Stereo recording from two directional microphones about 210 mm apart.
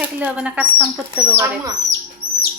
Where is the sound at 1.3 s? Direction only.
15° right (ahead or behind).